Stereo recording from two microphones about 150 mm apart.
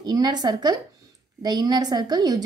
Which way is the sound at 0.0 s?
25° right (ahead or behind).